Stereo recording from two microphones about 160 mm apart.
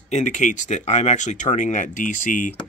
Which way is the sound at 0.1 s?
50° left (ahead or behind).